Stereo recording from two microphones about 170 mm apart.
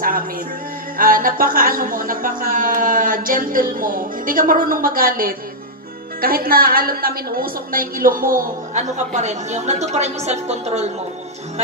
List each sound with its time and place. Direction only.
0.9 s a woman's voice: 55° right (ahead or behind); by 10.9 s 40° right (ahead or behind)